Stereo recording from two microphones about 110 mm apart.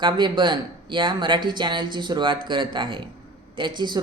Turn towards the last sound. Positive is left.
turn(degrees=-45)  # may be behind; listen again after turning